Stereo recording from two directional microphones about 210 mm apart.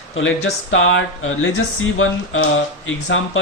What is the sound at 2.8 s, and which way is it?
Speech, 65° left (ahead or behind).